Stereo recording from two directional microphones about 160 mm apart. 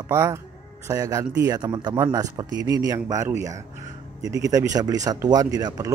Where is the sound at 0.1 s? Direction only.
15° right (ahead or behind).